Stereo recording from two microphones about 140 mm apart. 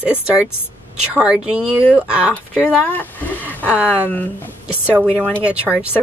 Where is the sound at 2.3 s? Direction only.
10° left (ahead or behind).